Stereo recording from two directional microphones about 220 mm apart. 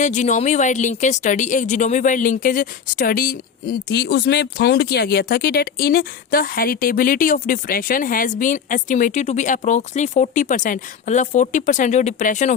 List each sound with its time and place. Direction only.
0.0 s speech: 35° left (ahead or behind)